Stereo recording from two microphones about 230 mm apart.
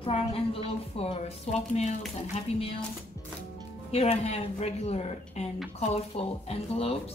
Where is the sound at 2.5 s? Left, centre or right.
Left.